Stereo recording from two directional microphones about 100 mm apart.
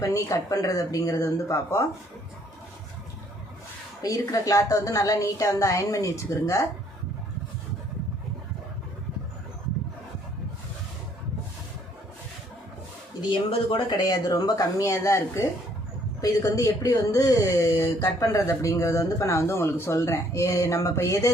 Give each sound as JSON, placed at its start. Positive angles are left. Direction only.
{"t": 0.0, "sound": "speech", "side_deg": 35}
{"t": 4.0, "sound": "speech", "side_deg": 35}
{"t": 13.3, "sound": "speech", "side_deg": 60}
{"t": 13.9, "sound": "speech", "side_deg": 40}